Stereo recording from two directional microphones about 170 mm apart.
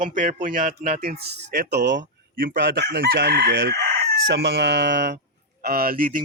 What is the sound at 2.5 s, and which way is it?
Chicken, 65° right (ahead or behind).